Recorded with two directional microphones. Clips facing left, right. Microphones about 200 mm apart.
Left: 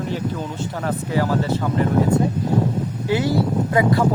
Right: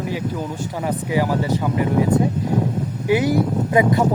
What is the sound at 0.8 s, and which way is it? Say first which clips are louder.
Speech: right 1 dB; 15° right (ahead or behind).